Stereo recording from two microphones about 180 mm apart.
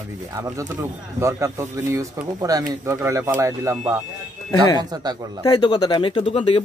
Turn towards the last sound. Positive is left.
turn(degrees=30)  # may be behind; listen again after turning